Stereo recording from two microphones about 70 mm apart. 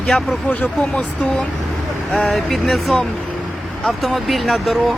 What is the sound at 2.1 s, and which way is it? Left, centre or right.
Speech, centre.